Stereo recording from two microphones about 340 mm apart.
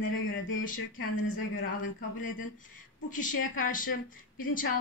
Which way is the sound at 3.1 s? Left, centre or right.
Left.